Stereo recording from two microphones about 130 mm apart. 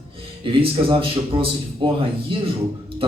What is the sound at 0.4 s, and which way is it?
A man's voice, 45° right (ahead or behind).